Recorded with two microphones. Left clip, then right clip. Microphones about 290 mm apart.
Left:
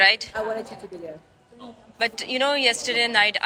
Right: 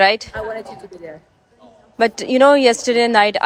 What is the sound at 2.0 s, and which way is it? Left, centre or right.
Speech, right.